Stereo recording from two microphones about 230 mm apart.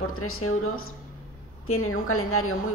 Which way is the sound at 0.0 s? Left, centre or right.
Left.